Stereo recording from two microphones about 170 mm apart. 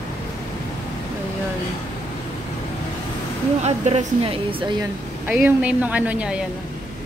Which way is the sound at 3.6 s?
40° right (ahead or behind).